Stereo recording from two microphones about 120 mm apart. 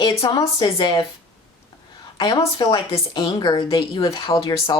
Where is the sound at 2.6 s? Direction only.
40° left (ahead or behind).